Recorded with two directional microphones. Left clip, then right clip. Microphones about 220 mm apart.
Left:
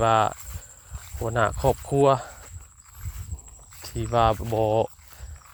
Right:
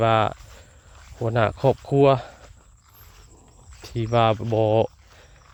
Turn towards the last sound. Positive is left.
turn(degrees=-25)  # may be behind; listen again after turning